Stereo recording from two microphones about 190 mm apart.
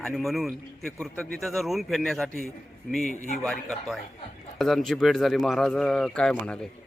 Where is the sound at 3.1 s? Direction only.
40° left (ahead or behind).